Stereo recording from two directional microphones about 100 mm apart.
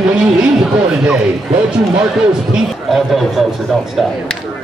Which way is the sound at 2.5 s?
5° right (ahead or behind).